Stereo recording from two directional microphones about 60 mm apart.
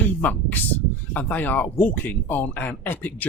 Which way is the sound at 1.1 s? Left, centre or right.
Left.